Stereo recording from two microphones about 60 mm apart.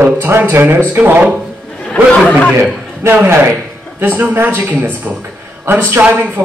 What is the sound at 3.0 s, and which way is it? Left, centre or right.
Speech, right.